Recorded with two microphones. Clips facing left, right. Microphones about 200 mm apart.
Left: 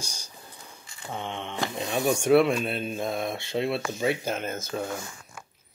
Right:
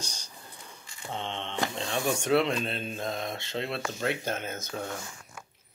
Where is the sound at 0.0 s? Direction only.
10° left (ahead or behind).